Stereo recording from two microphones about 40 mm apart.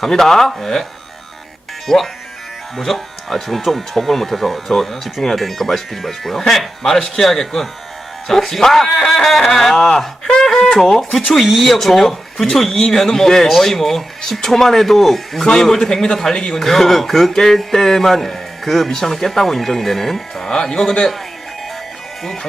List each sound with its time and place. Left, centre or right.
0.0 s speech: centre
1.9 s speech: centre
10.2 s a sound: centre
11.4 s speech: centre
15.4 s speech: centre
20.5 s speech: centre